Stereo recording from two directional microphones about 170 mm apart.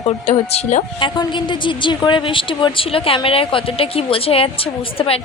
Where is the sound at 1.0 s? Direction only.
30° left (ahead or behind).